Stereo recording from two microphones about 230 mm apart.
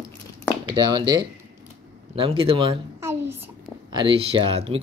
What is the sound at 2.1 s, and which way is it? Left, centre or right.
Speech, right.